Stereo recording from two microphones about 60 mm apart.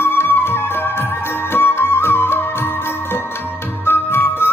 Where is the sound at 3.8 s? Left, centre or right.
Left.